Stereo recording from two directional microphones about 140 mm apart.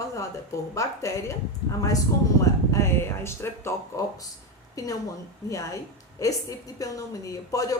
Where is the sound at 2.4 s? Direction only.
20° left (ahead or behind).